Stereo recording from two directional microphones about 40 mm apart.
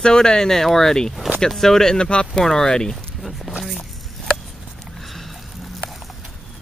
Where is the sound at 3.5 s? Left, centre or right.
Centre.